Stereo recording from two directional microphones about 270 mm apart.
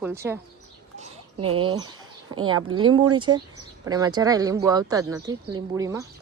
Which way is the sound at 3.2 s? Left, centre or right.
Centre.